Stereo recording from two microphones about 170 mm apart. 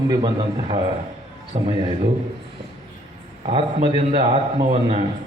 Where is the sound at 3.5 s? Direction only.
30° right (ahead or behind).